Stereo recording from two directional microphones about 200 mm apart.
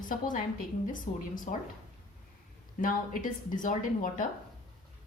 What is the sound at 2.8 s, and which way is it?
Speech, 45° left (ahead or behind).